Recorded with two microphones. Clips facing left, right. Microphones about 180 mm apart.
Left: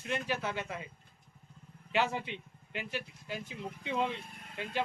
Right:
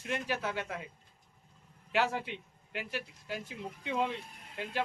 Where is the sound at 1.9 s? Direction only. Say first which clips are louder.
Right 1 dB; 5° right (ahead or behind).